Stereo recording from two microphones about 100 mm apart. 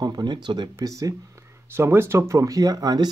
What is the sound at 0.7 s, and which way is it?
Speech, 35° right (ahead or behind).